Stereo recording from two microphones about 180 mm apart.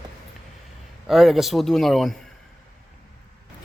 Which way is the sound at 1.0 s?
Centre (ahead or behind).